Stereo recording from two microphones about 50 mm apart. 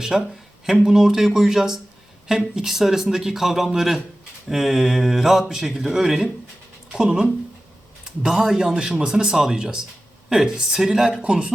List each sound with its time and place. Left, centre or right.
0.0 s speech: centre
11.2 s speech: right